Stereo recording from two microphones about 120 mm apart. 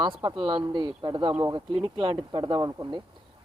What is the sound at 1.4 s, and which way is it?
Speech, 30° right (ahead or behind).